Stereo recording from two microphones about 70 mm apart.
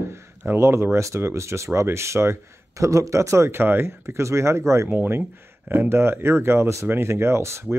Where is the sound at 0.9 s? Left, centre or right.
Right.